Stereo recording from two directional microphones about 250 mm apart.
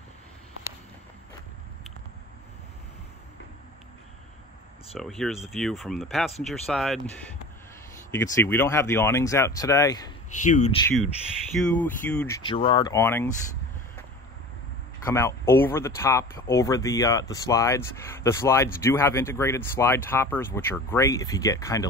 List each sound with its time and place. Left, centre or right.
4.9 s speech: centre
8.1 s speech: centre
10.4 s speech: left
11.5 s speech: centre
12.4 s speech: centre
15.0 s speech: centre